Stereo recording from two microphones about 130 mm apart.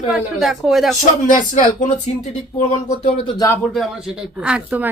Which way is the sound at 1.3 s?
80° left.